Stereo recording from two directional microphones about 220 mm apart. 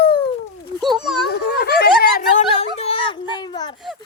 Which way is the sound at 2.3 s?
30° left (ahead or behind).